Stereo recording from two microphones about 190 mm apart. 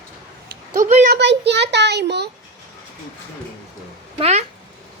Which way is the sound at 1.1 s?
65° right (ahead or behind).